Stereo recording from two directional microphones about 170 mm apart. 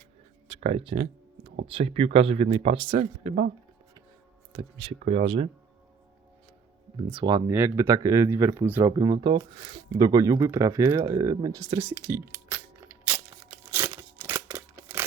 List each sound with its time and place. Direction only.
0.4 s speech: 35° right (ahead or behind)
4.5 s speech: 30° right (ahead or behind)
7.1 s speech: 25° right (ahead or behind)
8.9 s speech: 20° right (ahead or behind)
13.7 s scissors: 10° right (ahead or behind)